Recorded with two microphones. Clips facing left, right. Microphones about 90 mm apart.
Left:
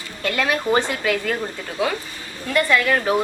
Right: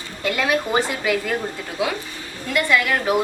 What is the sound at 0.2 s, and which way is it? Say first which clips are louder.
Speech: right 1 dB; 15° right (ahead or behind).